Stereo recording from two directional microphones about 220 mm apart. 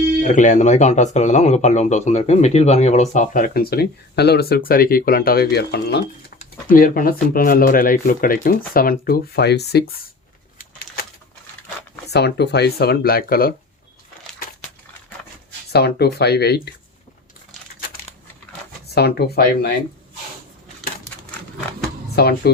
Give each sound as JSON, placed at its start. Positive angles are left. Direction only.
{"t": 0.2, "sound": "speech", "side_deg": 35}
{"t": 10.6, "sound": "bird", "side_deg": 40}
{"t": 12.1, "sound": "speech", "side_deg": 50}
{"t": 15.7, "sound": "speech", "side_deg": 45}
{"t": 18.9, "sound": "speech", "side_deg": 45}
{"t": 22.1, "sound": "speech", "side_deg": 45}